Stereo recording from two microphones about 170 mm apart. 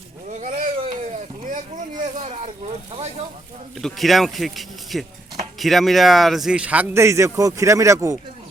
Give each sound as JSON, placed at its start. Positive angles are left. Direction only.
{"t": 0.3, "sound": "a sound", "side_deg": -45}
{"t": 1.1, "sound": "vehicle", "side_deg": -50}
{"t": 3.8, "sound": "speech", "side_deg": 0}